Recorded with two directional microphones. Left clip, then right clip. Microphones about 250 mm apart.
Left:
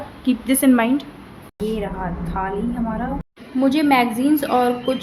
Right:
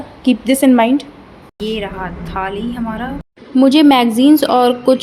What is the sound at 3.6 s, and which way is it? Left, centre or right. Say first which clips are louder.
A woman's voice: right 7 dB; right.